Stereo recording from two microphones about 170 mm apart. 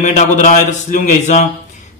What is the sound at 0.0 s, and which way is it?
A man's voice, 45° left (ahead or behind).